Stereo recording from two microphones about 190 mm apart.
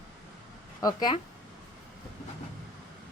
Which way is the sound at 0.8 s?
20° left (ahead or behind).